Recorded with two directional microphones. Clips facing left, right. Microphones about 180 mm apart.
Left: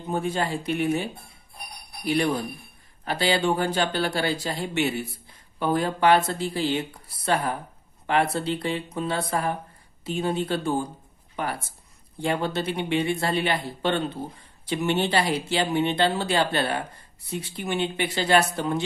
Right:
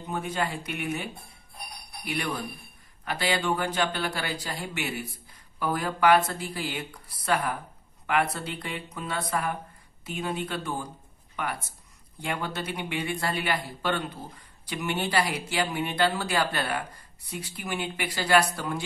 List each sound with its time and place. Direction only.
0.0 s speech: 30° left (ahead or behind)